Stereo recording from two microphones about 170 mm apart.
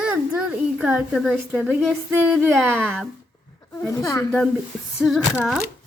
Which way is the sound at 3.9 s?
20° left (ahead or behind).